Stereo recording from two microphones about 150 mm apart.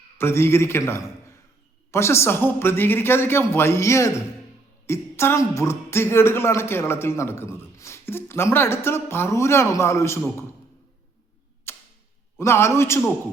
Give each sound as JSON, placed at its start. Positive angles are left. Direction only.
{"t": 0.2, "sound": "speech", "side_deg": 15}
{"t": 11.7, "sound": "tick-tock", "side_deg": 15}
{"t": 12.4, "sound": "speech", "side_deg": 15}